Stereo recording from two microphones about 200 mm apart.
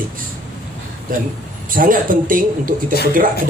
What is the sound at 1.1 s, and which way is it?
A man's voice, 45° right (ahead or behind).